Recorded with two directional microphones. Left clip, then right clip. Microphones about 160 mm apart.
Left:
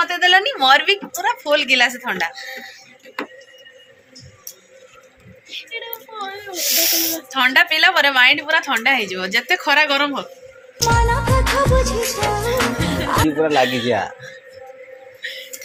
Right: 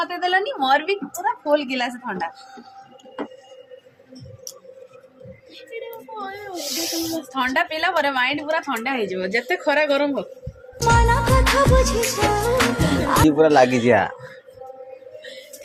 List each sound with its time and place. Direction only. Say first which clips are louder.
0.0 s speech: left 6 dB; centre (ahead or behind)
6.5 s speech: left 8 dB; centre (ahead or behind)
13.4 s speech: right 3 dB; 30° right (ahead or behind)
13.8 s speech: right 3 dB; 45° right (ahead or behind)